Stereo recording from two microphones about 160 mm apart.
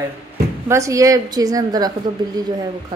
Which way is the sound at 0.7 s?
20° right (ahead or behind).